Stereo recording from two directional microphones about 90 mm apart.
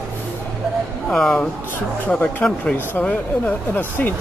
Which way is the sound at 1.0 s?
5° left (ahead or behind).